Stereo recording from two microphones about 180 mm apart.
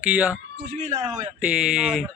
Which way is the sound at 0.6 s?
45° right (ahead or behind).